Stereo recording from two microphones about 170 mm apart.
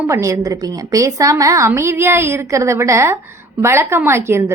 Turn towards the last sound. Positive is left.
turn(degrees=-15)  # may be behind; listen again after turning